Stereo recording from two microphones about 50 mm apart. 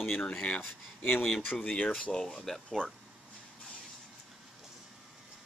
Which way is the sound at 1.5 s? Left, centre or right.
Centre.